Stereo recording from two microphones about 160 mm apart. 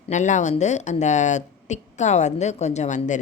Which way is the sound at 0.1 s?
50° left (ahead or behind).